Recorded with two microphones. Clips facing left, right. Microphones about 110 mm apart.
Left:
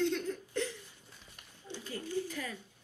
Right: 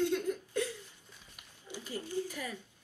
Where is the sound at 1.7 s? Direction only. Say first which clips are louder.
Even; 15° right (ahead or behind).